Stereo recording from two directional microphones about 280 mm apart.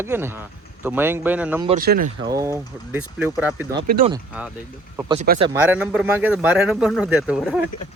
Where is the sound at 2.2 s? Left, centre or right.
Centre.